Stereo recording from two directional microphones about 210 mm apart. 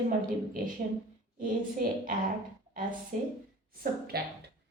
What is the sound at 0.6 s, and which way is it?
Speech, 40° right (ahead or behind).